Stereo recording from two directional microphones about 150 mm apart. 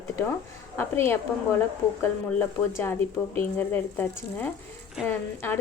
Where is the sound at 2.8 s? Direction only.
10° left (ahead or behind).